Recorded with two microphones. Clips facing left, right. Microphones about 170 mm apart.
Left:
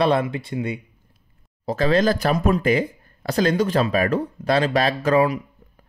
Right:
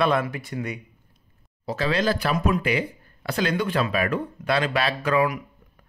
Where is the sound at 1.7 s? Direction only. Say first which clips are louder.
Left 5 dB; 45° left (ahead or behind).